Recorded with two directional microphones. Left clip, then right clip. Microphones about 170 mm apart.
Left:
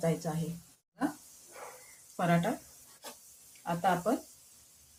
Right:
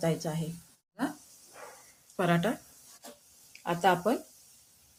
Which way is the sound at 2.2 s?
55° right (ahead or behind).